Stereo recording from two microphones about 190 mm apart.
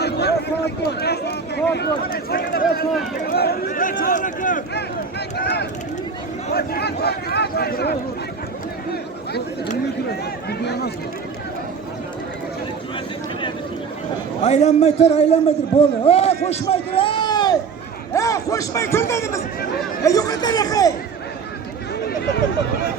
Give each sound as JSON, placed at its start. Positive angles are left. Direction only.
{"t": 0.0, "sound": "a sound", "side_deg": 60}
{"t": 1.7, "sound": "speech", "side_deg": 55}
{"t": 5.4, "sound": "speech", "side_deg": 60}
{"t": 10.6, "sound": "speech", "side_deg": 60}
{"t": 14.4, "sound": "a man's voice", "side_deg": 35}